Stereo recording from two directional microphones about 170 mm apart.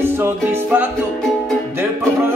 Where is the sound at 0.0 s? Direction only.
10° right (ahead or behind).